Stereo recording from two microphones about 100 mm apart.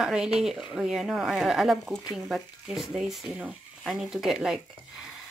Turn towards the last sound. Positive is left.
turn(degrees=-5)  # may be behind; listen again after turning